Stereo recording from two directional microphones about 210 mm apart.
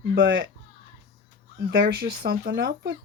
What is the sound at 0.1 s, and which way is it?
Speech, 60° right (ahead or behind).